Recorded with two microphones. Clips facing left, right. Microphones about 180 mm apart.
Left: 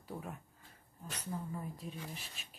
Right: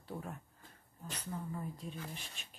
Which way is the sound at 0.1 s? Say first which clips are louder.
Even; 10° left (ahead or behind).